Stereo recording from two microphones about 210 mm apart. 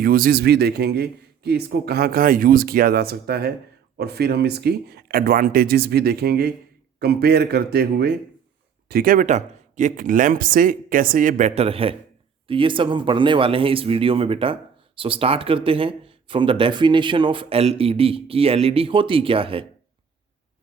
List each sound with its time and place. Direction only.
0.0 s a man's voice: 45° right (ahead or behind); by 19.6 s 25° right (ahead or behind)